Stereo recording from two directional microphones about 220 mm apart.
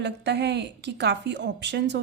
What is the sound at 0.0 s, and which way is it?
A woman's voice, 50° right (ahead or behind).